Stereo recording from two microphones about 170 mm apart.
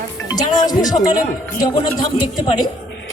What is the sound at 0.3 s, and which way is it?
Speech, 20° left (ahead or behind).